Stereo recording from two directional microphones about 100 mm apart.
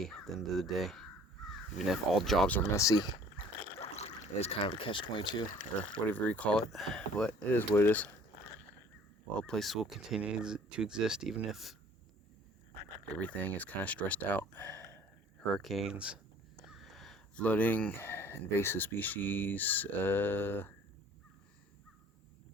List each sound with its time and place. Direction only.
0.3 s speech: centre (ahead or behind)
2.7 s speech: 40° left (ahead or behind)
3.3 s a sound: 90° left; by 5.4 s 55° left (ahead or behind)
6.1 s speech: 15° left (ahead or behind)
7.3 s speech: 15° left (ahead or behind)
9.4 s speech: 5° left (ahead or behind)
13.1 s speech: 15° left (ahead or behind)
15.4 s speech: 5° left (ahead or behind)
16.6 s a sound: centre (ahead or behind)
17.4 s speech: 15° left (ahead or behind)